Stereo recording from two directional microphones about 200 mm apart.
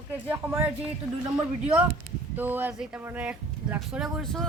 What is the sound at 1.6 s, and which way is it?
Speech, 5° right (ahead or behind).